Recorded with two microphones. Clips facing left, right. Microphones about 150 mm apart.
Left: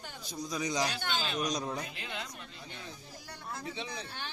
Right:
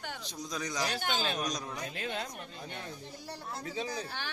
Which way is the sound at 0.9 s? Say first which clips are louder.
Right 2 dB; 45° right (ahead or behind).